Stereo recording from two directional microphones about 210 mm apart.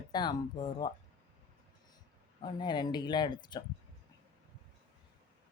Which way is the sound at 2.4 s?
20° left (ahead or behind).